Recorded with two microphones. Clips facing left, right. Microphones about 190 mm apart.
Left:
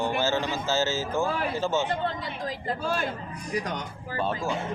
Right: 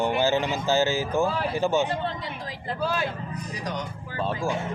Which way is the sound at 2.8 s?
50° left (ahead or behind).